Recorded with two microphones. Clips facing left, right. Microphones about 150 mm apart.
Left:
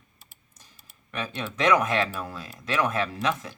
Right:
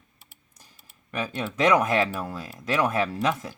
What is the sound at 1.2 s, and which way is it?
Speech, 10° right (ahead or behind).